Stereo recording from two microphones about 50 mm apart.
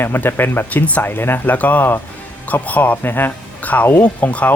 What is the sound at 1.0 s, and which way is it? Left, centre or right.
Speech, left.